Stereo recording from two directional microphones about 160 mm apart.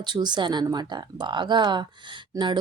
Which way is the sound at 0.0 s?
25° right (ahead or behind).